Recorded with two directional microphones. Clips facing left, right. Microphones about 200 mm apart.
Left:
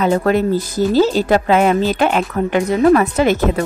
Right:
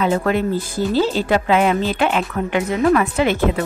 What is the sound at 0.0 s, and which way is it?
Speech, 40° left (ahead or behind).